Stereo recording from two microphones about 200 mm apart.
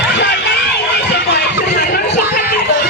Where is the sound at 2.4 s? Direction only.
50° left (ahead or behind).